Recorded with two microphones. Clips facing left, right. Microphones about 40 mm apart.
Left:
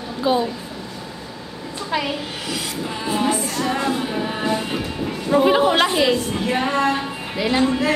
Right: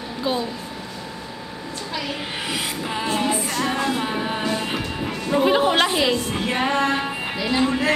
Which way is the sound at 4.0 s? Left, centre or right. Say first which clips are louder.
Even; centre.